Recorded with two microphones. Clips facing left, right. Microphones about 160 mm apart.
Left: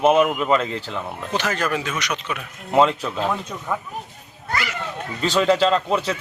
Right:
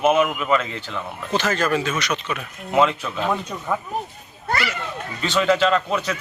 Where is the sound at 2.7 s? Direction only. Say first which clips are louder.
Left 1 dB; 30° left (ahead or behind).